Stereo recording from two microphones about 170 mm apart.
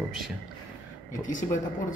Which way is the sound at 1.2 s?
50° left (ahead or behind).